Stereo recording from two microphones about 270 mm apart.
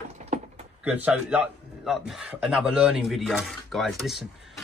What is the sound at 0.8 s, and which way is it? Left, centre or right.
Speech, centre.